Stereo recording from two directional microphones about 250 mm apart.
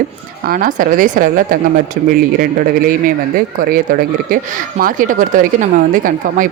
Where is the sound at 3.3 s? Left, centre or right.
Right.